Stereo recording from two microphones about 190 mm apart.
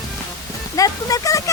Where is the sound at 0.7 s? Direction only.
20° left (ahead or behind).